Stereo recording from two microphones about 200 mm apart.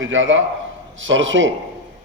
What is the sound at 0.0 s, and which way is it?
A man's voice, 70° right (ahead or behind).